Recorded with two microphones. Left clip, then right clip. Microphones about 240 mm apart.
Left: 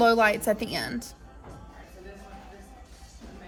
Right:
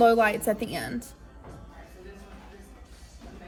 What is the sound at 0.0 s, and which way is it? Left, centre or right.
Speech, left.